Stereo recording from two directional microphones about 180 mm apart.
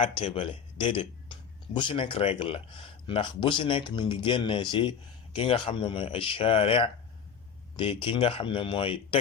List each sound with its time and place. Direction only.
0.0 s speech: 30° left (ahead or behind)